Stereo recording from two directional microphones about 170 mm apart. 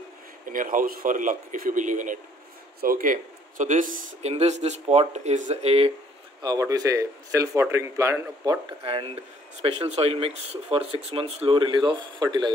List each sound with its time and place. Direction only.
0.5 s speech: 50° right (ahead or behind); by 5.9 s 35° right (ahead or behind)
6.4 s speech: 20° right (ahead or behind)
8.8 s speech: 35° right (ahead or behind)